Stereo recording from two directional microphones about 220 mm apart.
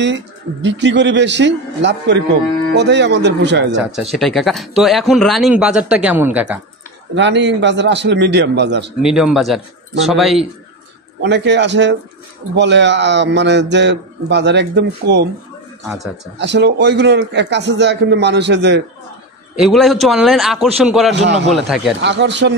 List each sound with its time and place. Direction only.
0.0 s a man's voice: 55° right (ahead or behind)
3.9 s speech: centre (ahead or behind)
7.2 s a man's voice: 55° right (ahead or behind)
9.0 s speech: centre (ahead or behind)
11.2 s a man's voice: 50° right (ahead or behind)
16.3 s a man's voice: 50° right (ahead or behind)
19.5 s speech: centre (ahead or behind)
21.1 s a man's voice: 50° right (ahead or behind)
21.5 s speech: centre (ahead or behind)
22.0 s a man's voice: 50° right (ahead or behind)